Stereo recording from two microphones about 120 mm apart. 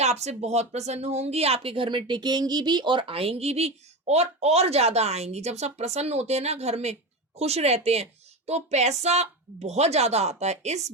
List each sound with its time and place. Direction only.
0.0 s speech: 70° right (ahead or behind)